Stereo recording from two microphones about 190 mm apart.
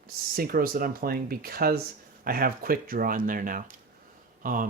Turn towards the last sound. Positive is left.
turn(degrees=-45)  # may be behind; listen again after turning